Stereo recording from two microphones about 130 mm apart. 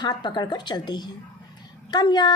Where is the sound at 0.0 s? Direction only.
35° left (ahead or behind).